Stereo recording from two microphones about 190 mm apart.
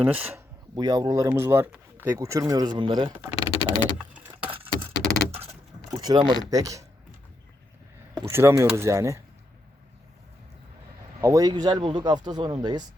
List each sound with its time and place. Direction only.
0.0 s speech: 10° right (ahead or behind)
0.8 s speech: 20° right (ahead or behind)
3.3 s a sound: 30° left (ahead or behind)
4.4 s keys jangling: 30° right (ahead or behind)
5.9 s speech: 20° right (ahead or behind)
8.3 s speech: 15° right (ahead or behind)
11.2 s speech: 15° right (ahead or behind)